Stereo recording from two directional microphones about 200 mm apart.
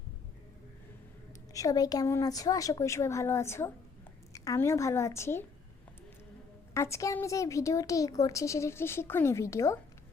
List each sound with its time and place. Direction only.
1.5 s a woman's voice: 20° left (ahead or behind)
6.7 s a woman's voice: 15° left (ahead or behind)